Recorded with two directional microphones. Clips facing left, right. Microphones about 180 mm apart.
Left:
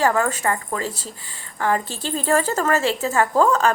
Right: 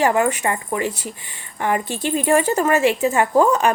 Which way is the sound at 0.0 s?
20° right (ahead or behind).